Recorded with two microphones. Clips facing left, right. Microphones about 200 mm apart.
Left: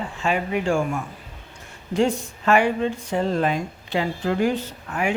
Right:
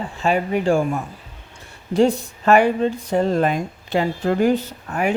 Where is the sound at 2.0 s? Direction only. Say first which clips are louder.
Right 4 dB; 35° right (ahead or behind).